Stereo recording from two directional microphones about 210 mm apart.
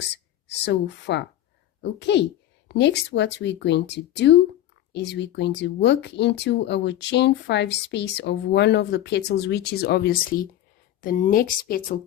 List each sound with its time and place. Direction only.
0.4 s a woman's voice: 55° left (ahead or behind)